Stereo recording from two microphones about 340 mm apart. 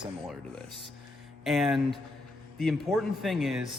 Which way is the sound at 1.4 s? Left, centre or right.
Centre.